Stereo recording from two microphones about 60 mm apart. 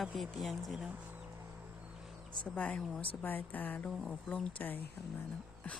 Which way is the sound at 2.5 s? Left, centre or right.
Left.